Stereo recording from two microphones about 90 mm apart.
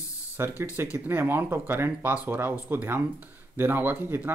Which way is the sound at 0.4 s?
30° right (ahead or behind).